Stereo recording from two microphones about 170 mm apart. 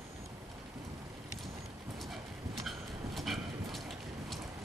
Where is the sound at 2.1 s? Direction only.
Centre (ahead or behind).